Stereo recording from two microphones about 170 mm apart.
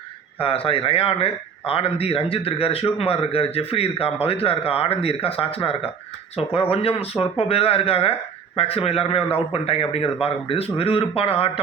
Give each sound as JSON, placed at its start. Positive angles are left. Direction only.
{"t": 0.3, "sound": "a man's voice", "side_deg": 35}